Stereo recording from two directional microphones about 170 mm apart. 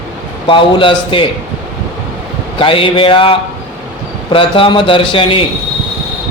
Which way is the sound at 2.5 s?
30° left (ahead or behind).